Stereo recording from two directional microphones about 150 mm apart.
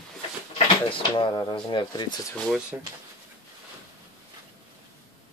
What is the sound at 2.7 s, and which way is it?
Speech, 15° right (ahead or behind).